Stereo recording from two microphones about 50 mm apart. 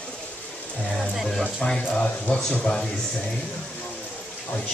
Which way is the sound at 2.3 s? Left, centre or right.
Left.